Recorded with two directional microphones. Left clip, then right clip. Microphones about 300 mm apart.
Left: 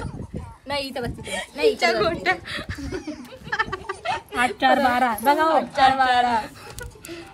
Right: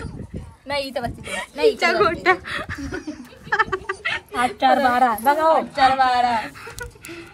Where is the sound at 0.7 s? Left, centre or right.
Centre.